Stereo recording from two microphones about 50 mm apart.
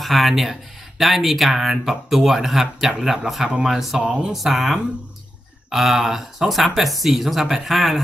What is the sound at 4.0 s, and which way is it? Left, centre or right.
Speech, centre.